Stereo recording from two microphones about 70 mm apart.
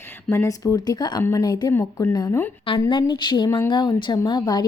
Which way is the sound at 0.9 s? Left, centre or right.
Left.